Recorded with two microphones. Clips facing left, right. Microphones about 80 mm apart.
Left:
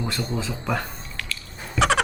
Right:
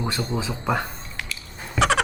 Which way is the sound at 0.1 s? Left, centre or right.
Centre.